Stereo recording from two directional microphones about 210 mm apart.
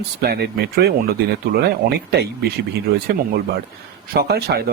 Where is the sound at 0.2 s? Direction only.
50° right (ahead or behind).